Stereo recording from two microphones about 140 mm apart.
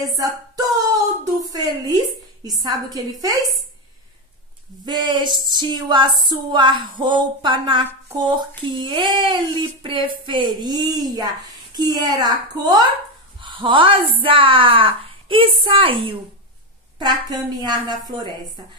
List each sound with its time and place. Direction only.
0.0 s music: 25° right (ahead or behind)
2.4 s a woman's voice: 30° right (ahead or behind)
4.8 s speech: 30° right (ahead or behind)
8.8 s speech: 35° right (ahead or behind)